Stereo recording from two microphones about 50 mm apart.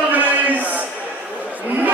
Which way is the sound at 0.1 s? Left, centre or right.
Right.